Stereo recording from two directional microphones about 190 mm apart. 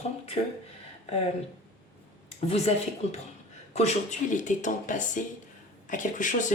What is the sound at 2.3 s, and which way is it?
Speech, 30° left (ahead or behind).